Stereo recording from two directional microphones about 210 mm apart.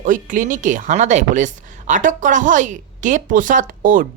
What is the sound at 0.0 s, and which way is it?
A woman's voice, 40° right (ahead or behind).